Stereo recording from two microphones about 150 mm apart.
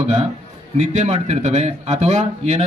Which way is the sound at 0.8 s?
50° right (ahead or behind).